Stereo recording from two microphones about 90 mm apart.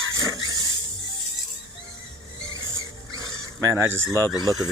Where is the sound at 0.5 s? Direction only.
45° right (ahead or behind).